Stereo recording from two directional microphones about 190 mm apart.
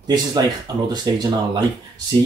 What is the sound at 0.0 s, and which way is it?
Speech, 20° right (ahead or behind).